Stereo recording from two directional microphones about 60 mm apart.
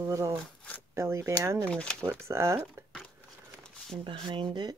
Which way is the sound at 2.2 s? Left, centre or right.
Right.